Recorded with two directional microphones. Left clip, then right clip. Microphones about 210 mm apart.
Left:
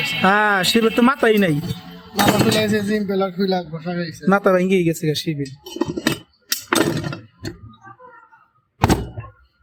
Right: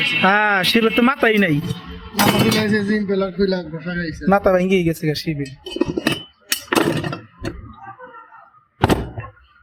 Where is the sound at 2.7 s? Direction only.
60° left (ahead or behind).